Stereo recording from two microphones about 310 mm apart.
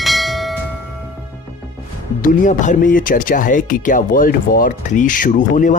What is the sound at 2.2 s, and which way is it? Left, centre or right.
Speech, left.